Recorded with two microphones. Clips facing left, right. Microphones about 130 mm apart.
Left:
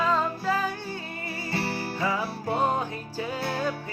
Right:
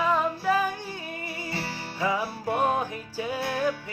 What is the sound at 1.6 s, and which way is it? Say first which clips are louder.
Music: left 7 dB; 60° left (ahead or behind).